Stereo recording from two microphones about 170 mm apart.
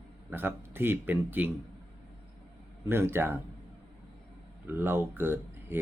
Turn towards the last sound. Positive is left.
turn(degrees=-15)  # may be behind; listen again after turning